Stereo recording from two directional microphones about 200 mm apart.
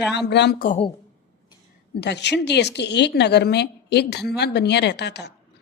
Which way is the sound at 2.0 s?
60° left (ahead or behind).